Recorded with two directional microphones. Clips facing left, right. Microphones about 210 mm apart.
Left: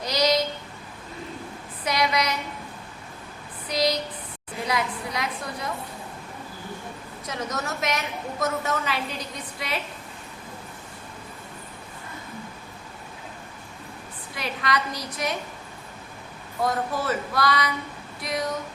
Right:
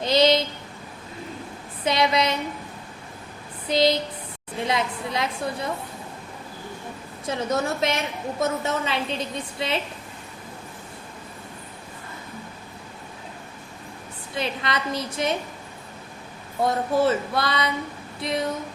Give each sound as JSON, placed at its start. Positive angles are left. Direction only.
{"t": 0.0, "sound": "a sound", "side_deg": -25}
{"t": 1.8, "sound": "a woman's voice", "side_deg": -25}
{"t": 3.7, "sound": "a woman's voice", "side_deg": -25}
{"t": 7.3, "sound": "a woman's voice", "side_deg": -30}
{"t": 14.3, "sound": "a woman's voice", "side_deg": -25}
{"t": 16.6, "sound": "a woman's voice", "side_deg": -25}